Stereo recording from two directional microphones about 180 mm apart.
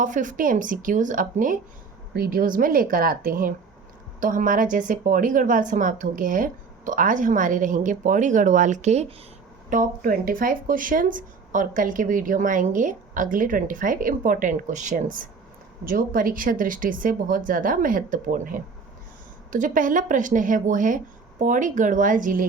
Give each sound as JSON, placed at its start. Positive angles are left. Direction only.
{"t": 0.0, "sound": "speech", "side_deg": -45}